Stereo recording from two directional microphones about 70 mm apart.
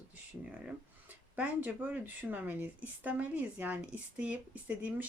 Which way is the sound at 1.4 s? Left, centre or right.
Right.